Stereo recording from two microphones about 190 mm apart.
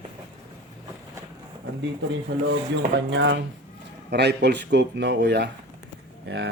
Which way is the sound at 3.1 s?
70° right (ahead or behind).